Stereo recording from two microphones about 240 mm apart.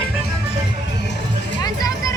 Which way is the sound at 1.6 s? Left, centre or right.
Centre.